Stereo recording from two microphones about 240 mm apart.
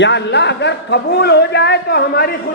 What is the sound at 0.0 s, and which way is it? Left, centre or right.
A man's voice, left.